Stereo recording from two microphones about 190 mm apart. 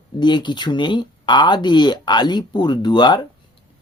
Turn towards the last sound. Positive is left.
turn(degrees=25)  # may be behind; listen again after turning